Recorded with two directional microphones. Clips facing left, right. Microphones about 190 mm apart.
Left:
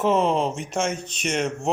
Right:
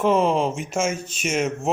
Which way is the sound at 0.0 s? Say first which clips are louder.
Right 1 dB; centre (ahead or behind).